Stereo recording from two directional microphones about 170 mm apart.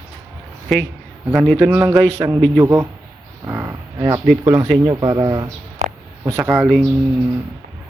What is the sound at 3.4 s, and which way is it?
Livestock, 15° right (ahead or behind).